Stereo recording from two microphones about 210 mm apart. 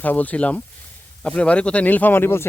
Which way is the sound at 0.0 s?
10° left (ahead or behind).